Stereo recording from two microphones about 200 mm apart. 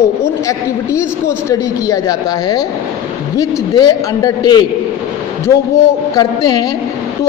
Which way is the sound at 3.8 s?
20° left (ahead or behind).